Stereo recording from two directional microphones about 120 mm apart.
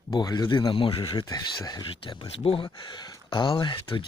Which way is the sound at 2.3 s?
55° left (ahead or behind).